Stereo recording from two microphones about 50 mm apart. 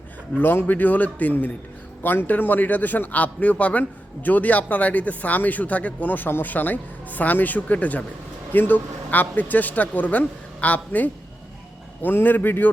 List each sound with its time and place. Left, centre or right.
0.3 s a man's voice: left